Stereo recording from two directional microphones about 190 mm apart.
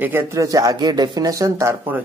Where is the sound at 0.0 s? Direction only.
10° right (ahead or behind).